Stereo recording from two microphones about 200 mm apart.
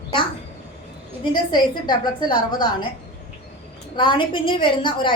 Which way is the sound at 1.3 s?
20° left (ahead or behind).